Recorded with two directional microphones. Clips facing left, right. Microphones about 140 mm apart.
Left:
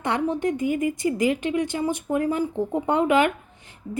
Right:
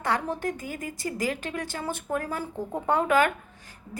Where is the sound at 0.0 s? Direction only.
20° left (ahead or behind).